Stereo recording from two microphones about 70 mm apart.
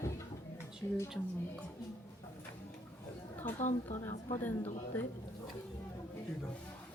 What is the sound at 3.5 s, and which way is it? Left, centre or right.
Speech, left.